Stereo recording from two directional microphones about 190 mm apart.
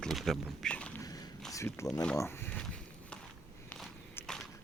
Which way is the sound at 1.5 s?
15° left (ahead or behind).